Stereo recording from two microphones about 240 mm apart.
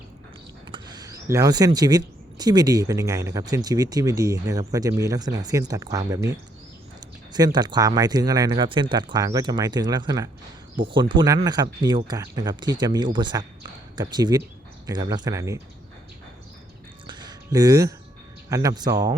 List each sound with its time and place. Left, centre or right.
0.7 s speech: centre
17.1 s a sound: centre
18.4 s speech: centre